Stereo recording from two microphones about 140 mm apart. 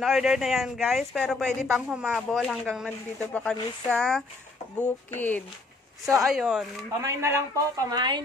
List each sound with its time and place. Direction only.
0.0 s speech: 5° right (ahead or behind)
6.2 s speech: 5° right (ahead or behind)
7.0 s speech: 20° right (ahead or behind)
7.9 s speech: 30° right (ahead or behind)